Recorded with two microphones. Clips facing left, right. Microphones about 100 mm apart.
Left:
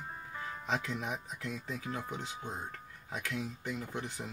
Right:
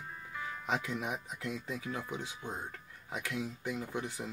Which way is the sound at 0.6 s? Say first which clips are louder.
Even; 15° right (ahead or behind).